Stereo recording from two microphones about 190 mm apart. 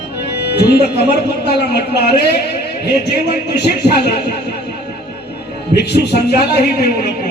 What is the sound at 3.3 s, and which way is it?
Speech, 60° left (ahead or behind).